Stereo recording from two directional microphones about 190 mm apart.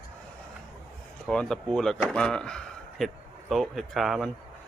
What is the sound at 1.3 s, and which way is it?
Speech, 5° left (ahead or behind).